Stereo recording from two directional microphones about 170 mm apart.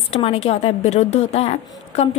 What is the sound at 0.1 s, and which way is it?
A woman's voice, 35° left (ahead or behind).